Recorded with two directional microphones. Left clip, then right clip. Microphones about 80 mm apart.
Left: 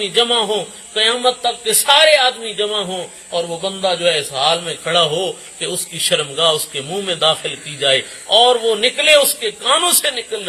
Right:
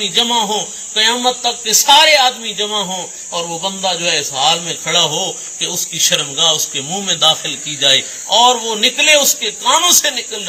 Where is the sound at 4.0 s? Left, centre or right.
Left.